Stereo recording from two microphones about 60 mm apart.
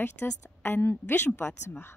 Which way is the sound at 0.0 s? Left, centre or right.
Left.